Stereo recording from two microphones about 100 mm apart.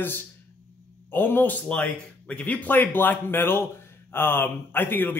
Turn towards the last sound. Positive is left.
turn(degrees=20)  # may be behind; listen again after turning